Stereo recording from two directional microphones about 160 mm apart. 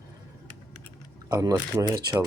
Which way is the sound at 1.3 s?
20° right (ahead or behind).